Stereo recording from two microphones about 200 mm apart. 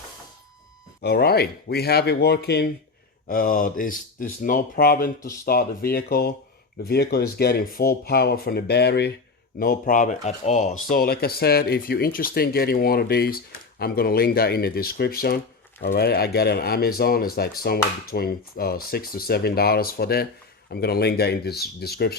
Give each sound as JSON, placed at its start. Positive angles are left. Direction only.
{"t": 1.0, "sound": "speech", "side_deg": 50}
{"t": 10.8, "sound": "speech", "side_deg": 45}